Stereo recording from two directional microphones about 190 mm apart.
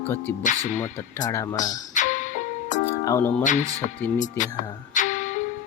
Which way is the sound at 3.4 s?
40° left (ahead or behind).